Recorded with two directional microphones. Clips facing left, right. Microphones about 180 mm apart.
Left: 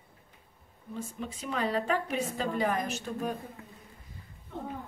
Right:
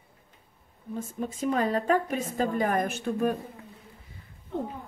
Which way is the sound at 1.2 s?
45° right (ahead or behind).